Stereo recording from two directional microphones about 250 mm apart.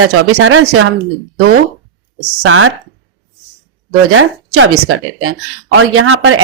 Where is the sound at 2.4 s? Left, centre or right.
Right.